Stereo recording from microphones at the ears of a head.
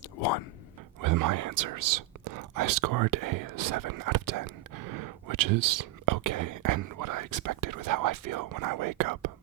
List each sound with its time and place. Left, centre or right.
1.0 s speech: right